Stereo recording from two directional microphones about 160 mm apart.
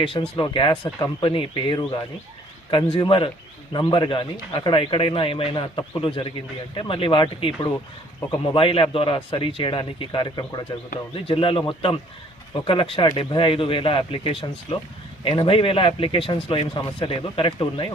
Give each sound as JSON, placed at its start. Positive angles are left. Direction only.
{"t": 0.0, "sound": "a man's voice", "side_deg": 30}